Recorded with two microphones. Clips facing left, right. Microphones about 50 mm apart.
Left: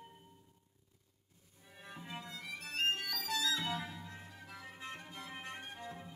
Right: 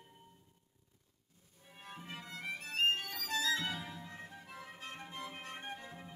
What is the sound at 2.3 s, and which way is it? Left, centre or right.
Music, right.